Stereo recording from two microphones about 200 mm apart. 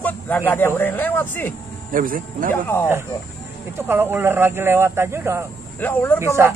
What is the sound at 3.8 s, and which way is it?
Speech, 10° right (ahead or behind).